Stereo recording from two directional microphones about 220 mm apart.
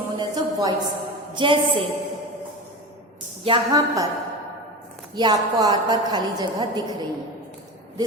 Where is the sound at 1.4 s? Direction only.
20° right (ahead or behind).